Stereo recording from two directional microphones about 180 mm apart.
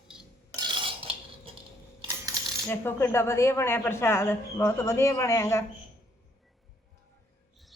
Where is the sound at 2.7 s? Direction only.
10° left (ahead or behind).